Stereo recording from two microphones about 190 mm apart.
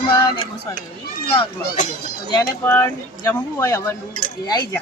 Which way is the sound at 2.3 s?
15° left (ahead or behind).